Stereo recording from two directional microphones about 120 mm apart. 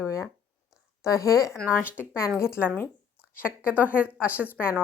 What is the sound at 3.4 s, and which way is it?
Speech, 20° left (ahead or behind).